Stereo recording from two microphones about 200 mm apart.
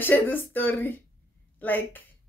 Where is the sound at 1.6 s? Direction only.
10° left (ahead or behind).